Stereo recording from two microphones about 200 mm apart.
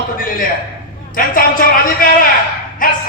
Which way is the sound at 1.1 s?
45° left (ahead or behind).